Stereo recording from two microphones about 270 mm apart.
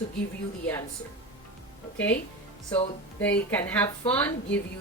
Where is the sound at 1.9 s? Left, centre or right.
Centre.